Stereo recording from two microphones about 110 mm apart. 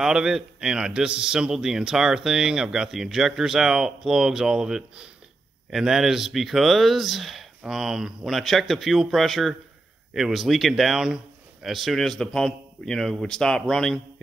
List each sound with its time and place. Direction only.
0.0 s a man's voice: 5° right (ahead or behind)